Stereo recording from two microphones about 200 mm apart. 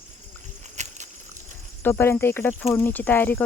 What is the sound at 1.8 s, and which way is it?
Speech, 10° left (ahead or behind).